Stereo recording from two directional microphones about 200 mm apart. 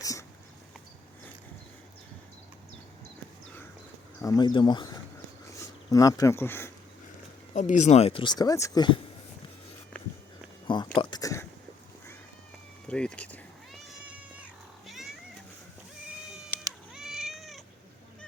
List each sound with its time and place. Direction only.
0.0 s dog: 15° left (ahead or behind)
4.2 s speech: 20° left (ahead or behind)
7.5 s speech: 40° left (ahead or behind); by 9.0 s 20° left (ahead or behind)
10.9 s a sound: 20° left (ahead or behind)
12.9 s a sound: 5° left (ahead or behind)
14.0 s cat: 5° right (ahead or behind)
16.9 s cat: centre (ahead or behind)